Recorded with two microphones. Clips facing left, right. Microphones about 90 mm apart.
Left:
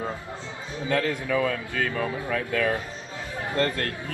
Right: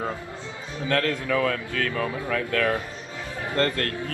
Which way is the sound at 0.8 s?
15° left (ahead or behind).